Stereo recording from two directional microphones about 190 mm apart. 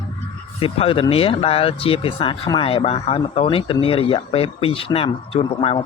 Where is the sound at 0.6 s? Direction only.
30° left (ahead or behind).